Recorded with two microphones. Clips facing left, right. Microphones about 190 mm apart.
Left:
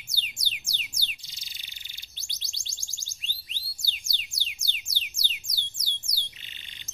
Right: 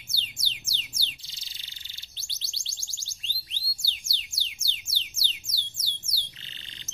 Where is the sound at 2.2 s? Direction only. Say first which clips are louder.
Even; 15° left (ahead or behind).